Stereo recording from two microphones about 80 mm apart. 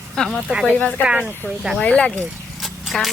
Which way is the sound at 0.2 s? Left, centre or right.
Centre.